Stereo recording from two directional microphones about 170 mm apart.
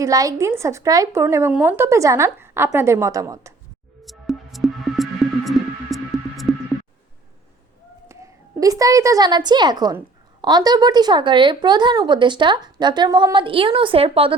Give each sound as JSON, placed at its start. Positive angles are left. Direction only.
{"t": 0.0, "sound": "speech", "side_deg": -20}
{"t": 4.0, "sound": "music", "side_deg": 0}
{"t": 8.0, "sound": "a woman's voice", "side_deg": -15}